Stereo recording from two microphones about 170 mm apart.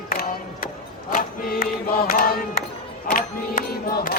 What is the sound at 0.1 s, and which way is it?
Music, 60° left (ahead or behind).